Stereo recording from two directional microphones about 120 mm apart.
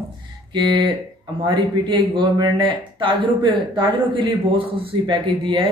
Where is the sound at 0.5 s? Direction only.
40° right (ahead or behind).